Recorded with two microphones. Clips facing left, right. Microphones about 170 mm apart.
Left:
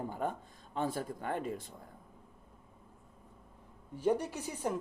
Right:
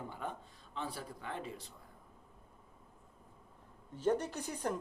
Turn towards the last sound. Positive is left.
turn(degrees=10)  # may be behind; listen again after turning